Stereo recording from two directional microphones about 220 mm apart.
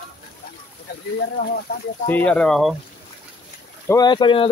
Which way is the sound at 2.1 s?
5° left (ahead or behind).